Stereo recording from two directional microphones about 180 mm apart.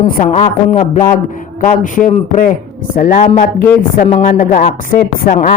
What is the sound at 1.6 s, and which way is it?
A man's voice, 45° left (ahead or behind).